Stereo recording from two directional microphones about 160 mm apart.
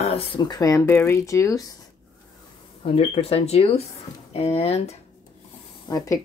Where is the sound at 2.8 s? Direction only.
40° left (ahead or behind).